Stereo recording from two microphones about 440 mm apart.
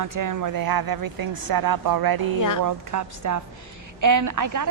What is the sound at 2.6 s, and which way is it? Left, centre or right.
A woman's voice, right.